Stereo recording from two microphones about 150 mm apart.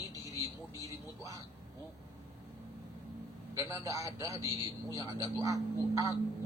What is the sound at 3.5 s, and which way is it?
A man's voice, 20° right (ahead or behind).